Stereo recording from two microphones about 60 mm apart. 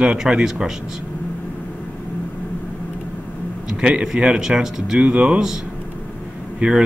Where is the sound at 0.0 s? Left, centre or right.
Centre.